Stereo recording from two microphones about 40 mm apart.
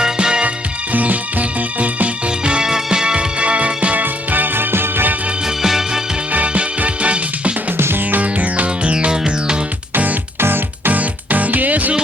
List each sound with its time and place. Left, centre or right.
0.0 s music: right
0.9 s music: right
4.0 s music: right
5.6 s music: centre
6.3 s music: right
7.8 s music: right
8.1 s music: right
10.4 s music: right
10.9 s music: right